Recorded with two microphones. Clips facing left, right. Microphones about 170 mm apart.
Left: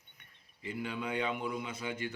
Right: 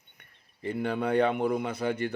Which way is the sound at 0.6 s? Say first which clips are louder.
Right 9 dB; 60° right (ahead or behind).